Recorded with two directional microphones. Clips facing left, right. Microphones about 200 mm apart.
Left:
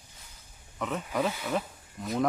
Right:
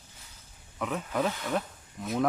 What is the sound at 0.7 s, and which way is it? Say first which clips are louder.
Speech: even; centre (ahead or behind).